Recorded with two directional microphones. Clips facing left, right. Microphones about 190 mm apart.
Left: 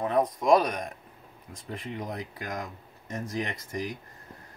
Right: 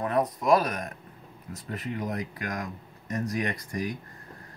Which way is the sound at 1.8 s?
25° left (ahead or behind).